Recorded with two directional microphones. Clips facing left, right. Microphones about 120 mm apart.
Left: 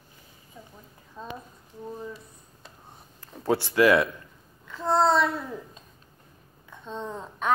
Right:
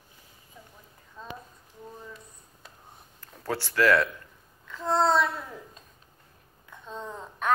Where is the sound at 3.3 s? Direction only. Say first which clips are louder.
Left 5 dB; 15° left (ahead or behind).